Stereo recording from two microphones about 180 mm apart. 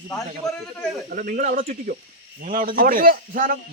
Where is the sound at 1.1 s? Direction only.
50° right (ahead or behind).